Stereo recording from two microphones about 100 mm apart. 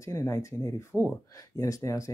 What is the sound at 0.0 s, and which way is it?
Speech, 30° left (ahead or behind).